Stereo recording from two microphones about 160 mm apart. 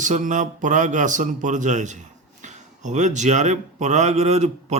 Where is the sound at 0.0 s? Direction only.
50° right (ahead or behind).